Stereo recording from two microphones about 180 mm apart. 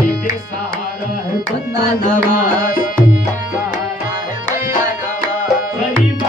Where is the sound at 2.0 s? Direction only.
50° left (ahead or behind).